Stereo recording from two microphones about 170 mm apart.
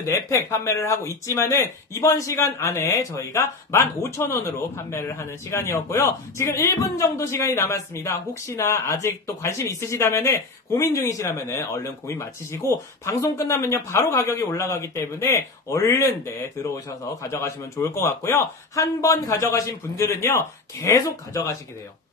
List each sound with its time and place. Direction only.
0.0 s speech: 15° left (ahead or behind)